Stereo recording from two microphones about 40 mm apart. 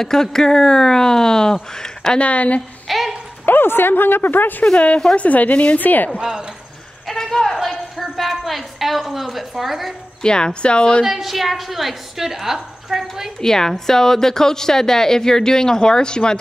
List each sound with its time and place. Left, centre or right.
0.0 s a woman's voice: centre
2.1 s speech: left
2.9 s a sound: centre
3.4 s speech: left
4.7 s speech: left
5.8 s speech: left
6.1 s speech: centre
7.1 s a sound: centre
8.0 s a woman's voice: centre
10.2 s speech: left
11.1 s a woman's voice: centre
13.4 s a woman's voice: centre